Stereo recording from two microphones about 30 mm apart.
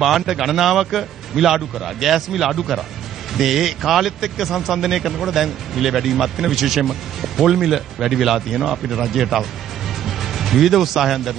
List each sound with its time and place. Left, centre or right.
0.0 s a man's voice: centre